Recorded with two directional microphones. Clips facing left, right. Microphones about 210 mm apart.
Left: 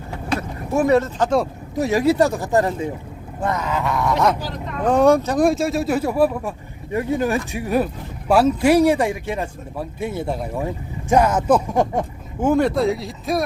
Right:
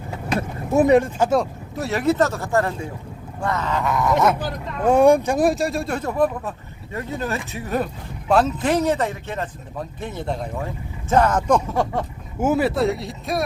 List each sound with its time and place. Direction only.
0.3 s speech: 20° right (ahead or behind)
1.8 s speech: 15° left (ahead or behind); by 5.4 s 15° right (ahead or behind)
5.4 s speech: centre (ahead or behind)
11.7 s a sound: 20° left (ahead or behind)
12.4 s speech: 5° right (ahead or behind)